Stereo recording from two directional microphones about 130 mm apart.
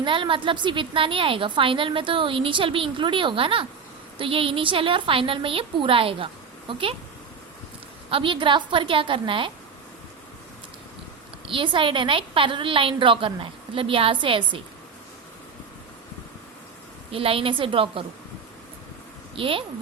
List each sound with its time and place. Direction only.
0.0 s a woman's voice: 40° right (ahead or behind)
8.1 s a woman's voice: 40° right (ahead or behind)
11.4 s a woman's voice: 40° right (ahead or behind)
17.1 s a woman's voice: 45° right (ahead or behind)
19.4 s a woman's voice: 45° right (ahead or behind)